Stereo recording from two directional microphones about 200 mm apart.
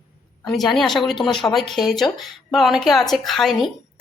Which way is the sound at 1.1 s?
25° left (ahead or behind).